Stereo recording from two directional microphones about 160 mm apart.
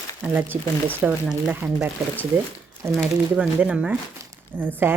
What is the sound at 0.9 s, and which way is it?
Speech, 5° right (ahead or behind).